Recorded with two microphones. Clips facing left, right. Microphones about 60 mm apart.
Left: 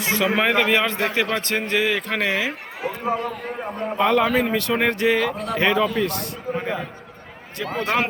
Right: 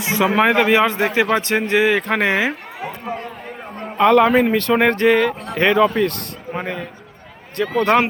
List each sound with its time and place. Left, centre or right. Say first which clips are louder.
0.0 s a man's voice: right 4 dB; centre
2.0 s speech: right 5 dB; right
2.8 s speech: left 3 dB; centre
3.9 s a man's voice: right 6 dB; right
4.5 s a man's voice: right 5 dB; right